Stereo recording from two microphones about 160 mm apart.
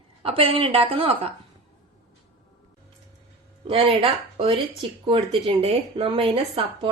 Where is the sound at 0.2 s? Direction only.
35° right (ahead or behind).